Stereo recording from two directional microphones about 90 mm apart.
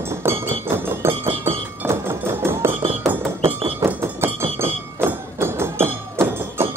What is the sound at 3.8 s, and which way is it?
Hammer, 25° right (ahead or behind).